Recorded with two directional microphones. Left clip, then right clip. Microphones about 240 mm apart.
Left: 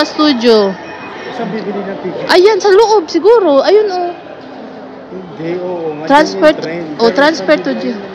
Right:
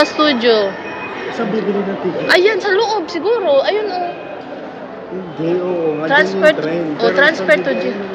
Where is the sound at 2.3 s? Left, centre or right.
Left.